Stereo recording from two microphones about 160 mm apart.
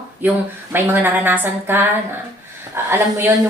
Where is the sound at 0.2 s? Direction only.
10° right (ahead or behind).